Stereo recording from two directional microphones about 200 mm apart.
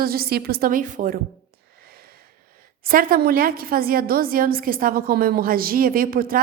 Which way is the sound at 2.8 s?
45° right (ahead or behind).